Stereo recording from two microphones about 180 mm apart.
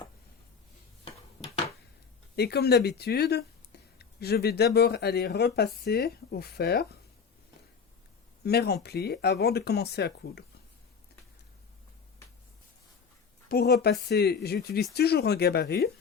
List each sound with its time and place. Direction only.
1.0 s a sound: 35° left (ahead or behind)
2.3 s speech: 65° left (ahead or behind)
8.4 s speech: 60° left (ahead or behind)
13.5 s speech: 60° left (ahead or behind)